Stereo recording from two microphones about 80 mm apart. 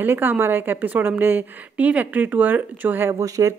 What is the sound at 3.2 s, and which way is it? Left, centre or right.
Speech, right.